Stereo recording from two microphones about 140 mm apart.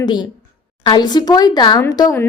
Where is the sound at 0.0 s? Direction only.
30° left (ahead or behind).